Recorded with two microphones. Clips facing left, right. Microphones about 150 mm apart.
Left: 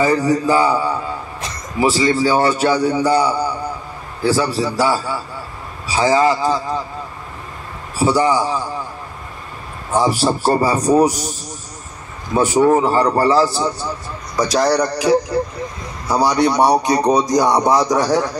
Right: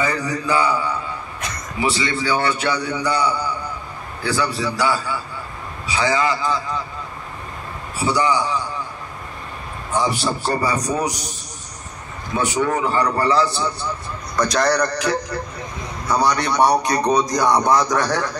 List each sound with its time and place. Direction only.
0.0 s a man's voice: 40° left (ahead or behind)
8.0 s a man's voice: 40° left (ahead or behind)
10.2 s music: 45° left (ahead or behind)
10.9 s a man's voice: 40° left (ahead or behind)
12.4 s a man's voice: 30° left (ahead or behind)
14.3 s a man's voice: 5° left (ahead or behind)